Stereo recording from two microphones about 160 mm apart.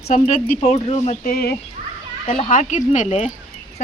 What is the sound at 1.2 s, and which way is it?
Speech, 70° left (ahead or behind).